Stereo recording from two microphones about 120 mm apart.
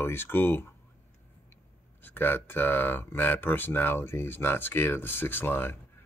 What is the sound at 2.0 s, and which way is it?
Speech, 15° left (ahead or behind).